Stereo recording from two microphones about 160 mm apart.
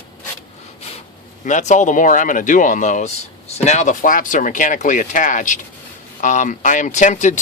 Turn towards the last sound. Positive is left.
turn(degrees=50)  # may be behind; listen again after turning